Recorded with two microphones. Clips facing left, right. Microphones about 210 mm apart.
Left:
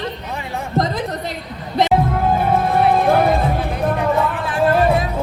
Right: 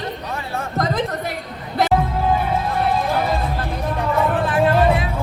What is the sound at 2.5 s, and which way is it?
Music, 55° left (ahead or behind).